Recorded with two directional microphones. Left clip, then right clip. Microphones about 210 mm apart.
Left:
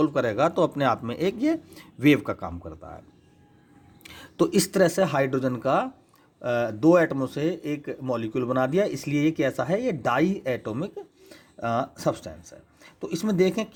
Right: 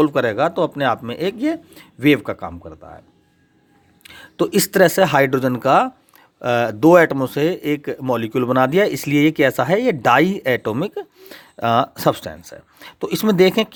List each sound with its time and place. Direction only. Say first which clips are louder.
0.0 s speech: right 6 dB; 25° right (ahead or behind)
4.0 s speech: right 4 dB; 10° right (ahead or behind); by 13.7 s 35° right (ahead or behind)